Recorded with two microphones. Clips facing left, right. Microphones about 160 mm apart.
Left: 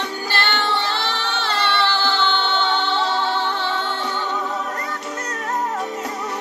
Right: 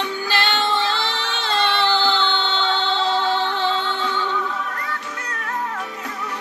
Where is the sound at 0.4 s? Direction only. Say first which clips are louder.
Right 1 dB; 15° right (ahead or behind).